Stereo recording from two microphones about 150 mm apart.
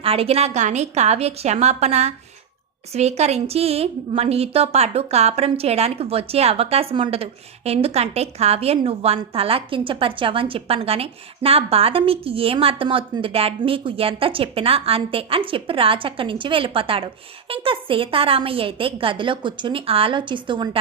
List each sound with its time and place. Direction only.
0.0 s a woman's voice: 40° right (ahead or behind)